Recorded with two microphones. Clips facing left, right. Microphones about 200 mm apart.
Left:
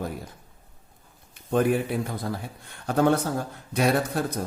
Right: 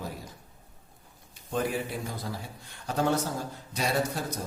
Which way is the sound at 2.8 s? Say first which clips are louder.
Left 6 dB; 60° left (ahead or behind).